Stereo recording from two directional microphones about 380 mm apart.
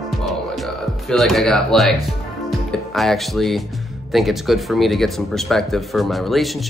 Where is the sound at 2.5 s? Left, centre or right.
Centre.